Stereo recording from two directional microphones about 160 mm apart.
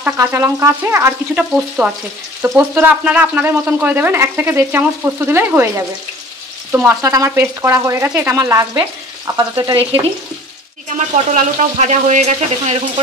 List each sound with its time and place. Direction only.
0.0 s speech: 15° right (ahead or behind)
11.0 s speech: 45° right (ahead or behind)